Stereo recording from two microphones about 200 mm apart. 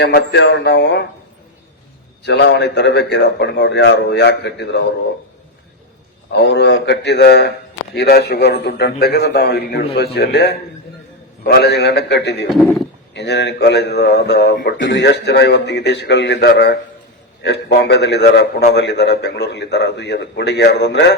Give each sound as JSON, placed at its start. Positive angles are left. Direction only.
{"t": 0.0, "sound": "speech", "side_deg": 55}
{"t": 2.2, "sound": "speech", "side_deg": 60}
{"t": 6.3, "sound": "a man's voice", "side_deg": 60}